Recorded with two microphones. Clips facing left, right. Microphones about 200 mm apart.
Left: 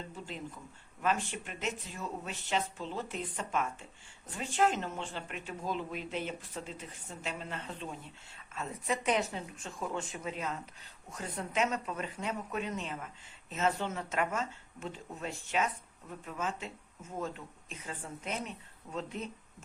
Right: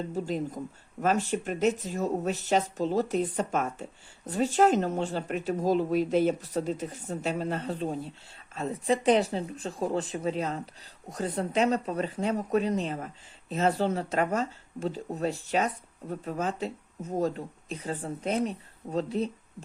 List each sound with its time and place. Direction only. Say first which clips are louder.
0.1 s speech: right 12 dB; 40° right (ahead or behind)